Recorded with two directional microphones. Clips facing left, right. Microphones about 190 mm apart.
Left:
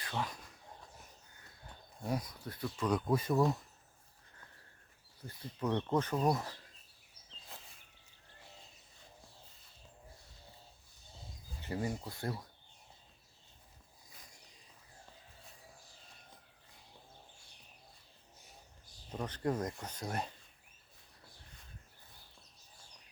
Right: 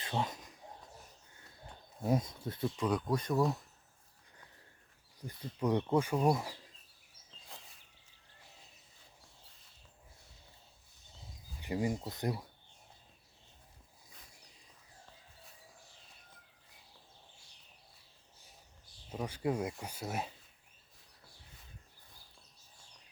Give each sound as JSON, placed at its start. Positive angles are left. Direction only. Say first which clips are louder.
{"t": 0.0, "sound": "a sound", "louder": "right 3 dB", "side_deg": -20}
{"t": 2.0, "sound": "speech", "louder": "right 5 dB", "side_deg": -25}
{"t": 3.1, "sound": "speech", "louder": "left 3 dB", "side_deg": 5}
{"t": 5.2, "sound": "speech", "louder": "right 3 dB", "side_deg": -15}
{"t": 7.3, "sound": "a sound", "louder": "left 1 dB", "side_deg": -10}
{"t": 11.6, "sound": "speech", "louder": "right 3 dB", "side_deg": -15}
{"t": 19.1, "sound": "speech", "louder": "right 1 dB", "side_deg": -10}